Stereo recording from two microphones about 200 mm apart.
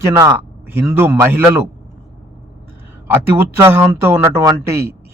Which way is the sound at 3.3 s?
10° right (ahead or behind).